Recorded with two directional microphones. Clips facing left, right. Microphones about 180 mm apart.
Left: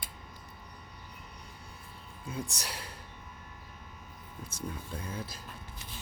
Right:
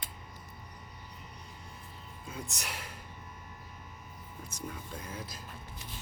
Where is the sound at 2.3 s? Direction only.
35° left (ahead or behind).